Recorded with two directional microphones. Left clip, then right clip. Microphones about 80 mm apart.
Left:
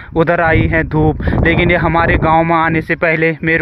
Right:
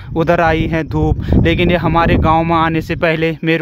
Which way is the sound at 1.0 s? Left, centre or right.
Right.